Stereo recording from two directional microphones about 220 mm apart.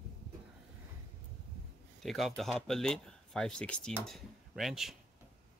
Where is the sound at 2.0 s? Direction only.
Centre (ahead or behind).